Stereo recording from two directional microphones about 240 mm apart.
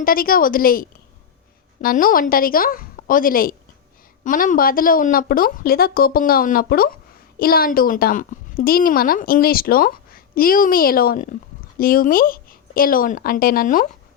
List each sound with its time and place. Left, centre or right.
0.0 s a woman's voice: left